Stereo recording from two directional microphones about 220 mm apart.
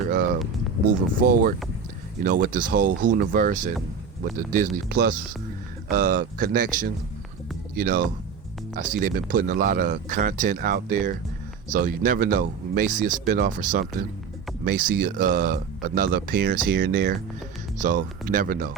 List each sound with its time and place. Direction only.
0.9 s speech: 40° right (ahead or behind)